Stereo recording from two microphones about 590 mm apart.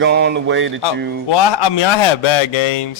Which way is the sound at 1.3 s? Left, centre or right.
Left.